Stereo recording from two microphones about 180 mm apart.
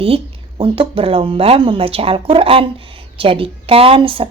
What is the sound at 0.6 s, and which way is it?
A woman's voice, 30° right (ahead or behind).